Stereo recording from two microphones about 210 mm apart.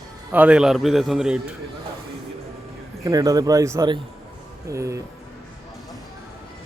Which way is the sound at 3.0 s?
15° right (ahead or behind).